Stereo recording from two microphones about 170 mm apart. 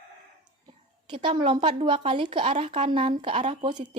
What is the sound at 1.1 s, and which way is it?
Speech, 30° right (ahead or behind).